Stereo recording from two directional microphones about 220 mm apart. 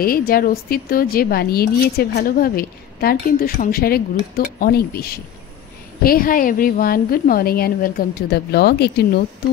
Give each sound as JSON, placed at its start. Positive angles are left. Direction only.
{"t": 0.3, "sound": "a woman's voice", "side_deg": 40}